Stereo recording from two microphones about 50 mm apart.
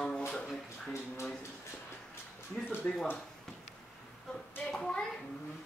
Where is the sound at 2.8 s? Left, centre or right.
Left.